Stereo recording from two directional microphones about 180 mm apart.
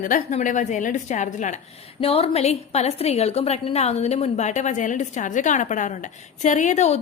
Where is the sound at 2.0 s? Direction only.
30° left (ahead or behind).